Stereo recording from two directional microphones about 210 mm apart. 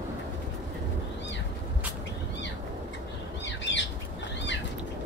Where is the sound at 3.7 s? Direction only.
55° left (ahead or behind).